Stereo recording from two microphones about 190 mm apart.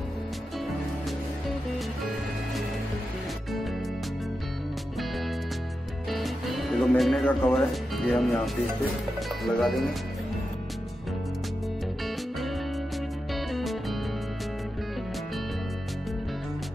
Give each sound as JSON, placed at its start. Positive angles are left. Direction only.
{"t": 6.0, "sound": "music", "side_deg": 0}
{"t": 9.4, "sound": "speech", "side_deg": 0}
{"t": 13.3, "sound": "music", "side_deg": 0}